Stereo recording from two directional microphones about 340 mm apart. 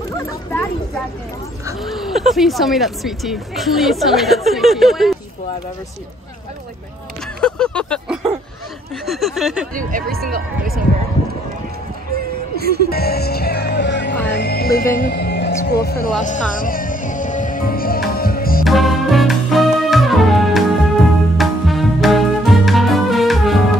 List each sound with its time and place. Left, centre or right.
0.3 s a sound: centre
1.7 s speech: centre
7.3 s a sound: centre
9.8 s speech: right
12.5 s music: right
12.9 s music: left
18.6 s music: centre